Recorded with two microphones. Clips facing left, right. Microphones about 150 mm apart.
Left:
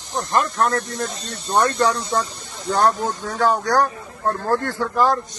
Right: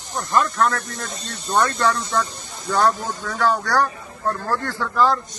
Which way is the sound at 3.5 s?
20° left (ahead or behind).